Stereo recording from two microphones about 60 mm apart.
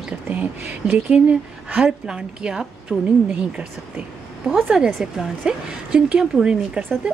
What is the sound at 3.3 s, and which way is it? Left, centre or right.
A woman's voice, centre.